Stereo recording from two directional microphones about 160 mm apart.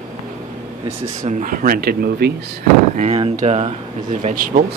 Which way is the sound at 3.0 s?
45° right (ahead or behind).